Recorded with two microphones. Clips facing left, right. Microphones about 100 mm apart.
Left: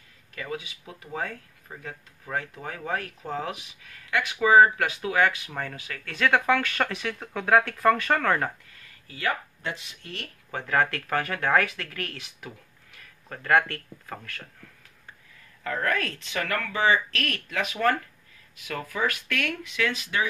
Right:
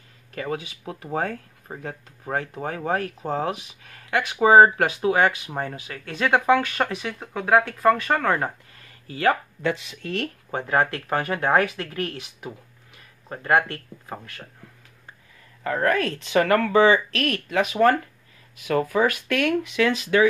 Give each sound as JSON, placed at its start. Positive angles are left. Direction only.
{"t": 0.3, "sound": "speech", "side_deg": -40}
{"t": 9.0, "sound": "speech", "side_deg": -45}
{"t": 9.6, "sound": "speech", "side_deg": -80}
{"t": 10.5, "sound": "speech", "side_deg": -25}
{"t": 16.3, "sound": "speech", "side_deg": -40}
{"t": 17.1, "sound": "speech", "side_deg": -20}
{"t": 17.8, "sound": "speech", "side_deg": -30}
{"t": 19.0, "sound": "speech", "side_deg": -15}
{"t": 20.1, "sound": "speech", "side_deg": -75}